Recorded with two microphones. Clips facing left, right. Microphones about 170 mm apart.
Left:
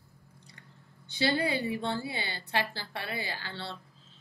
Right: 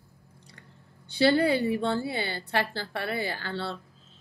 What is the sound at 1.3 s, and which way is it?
A woman's voice, 55° right (ahead or behind).